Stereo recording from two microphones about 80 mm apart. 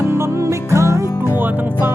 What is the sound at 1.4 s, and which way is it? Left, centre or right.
Music, right.